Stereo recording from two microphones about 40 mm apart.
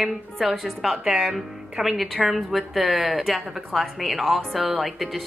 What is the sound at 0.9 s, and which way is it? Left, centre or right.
Speech, centre.